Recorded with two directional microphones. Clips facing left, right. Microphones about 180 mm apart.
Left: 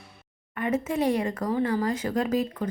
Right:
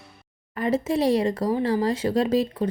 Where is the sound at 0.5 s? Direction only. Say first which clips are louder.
Right 3 dB; 35° right (ahead or behind).